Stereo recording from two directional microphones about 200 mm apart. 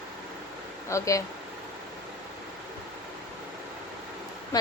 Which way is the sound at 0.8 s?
15° left (ahead or behind).